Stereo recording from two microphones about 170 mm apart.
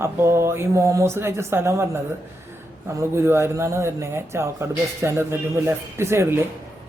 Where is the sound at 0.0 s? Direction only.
15° right (ahead or behind).